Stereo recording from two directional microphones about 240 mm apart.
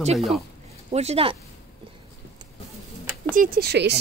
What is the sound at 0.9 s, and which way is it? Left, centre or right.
Speech, right.